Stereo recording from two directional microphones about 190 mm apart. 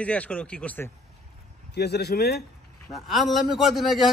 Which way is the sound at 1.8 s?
60° left (ahead or behind).